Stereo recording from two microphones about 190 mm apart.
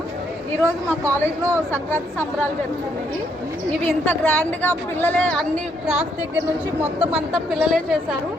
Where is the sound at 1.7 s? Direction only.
10° left (ahead or behind).